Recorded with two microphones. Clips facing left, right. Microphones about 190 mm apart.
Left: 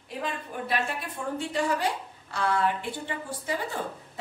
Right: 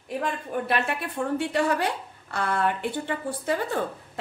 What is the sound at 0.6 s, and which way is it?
A woman's voice, 65° right (ahead or behind).